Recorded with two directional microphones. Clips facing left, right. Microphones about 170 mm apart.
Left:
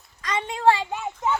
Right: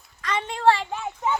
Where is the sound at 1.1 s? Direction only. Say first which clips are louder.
Even; centre (ahead or behind).